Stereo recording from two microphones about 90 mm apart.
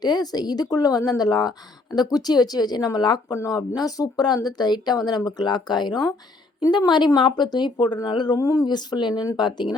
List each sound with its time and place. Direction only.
0.0 s speech: 50° left (ahead or behind)
3.3 s a woman's voice: 35° left (ahead or behind); by 8.4 s 55° left (ahead or behind)
8.4 s a woman's voice: 40° left (ahead or behind); by 9.7 s 60° left (ahead or behind)